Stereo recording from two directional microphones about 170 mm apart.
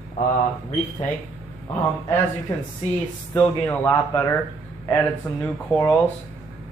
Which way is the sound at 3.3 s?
10° left (ahead or behind).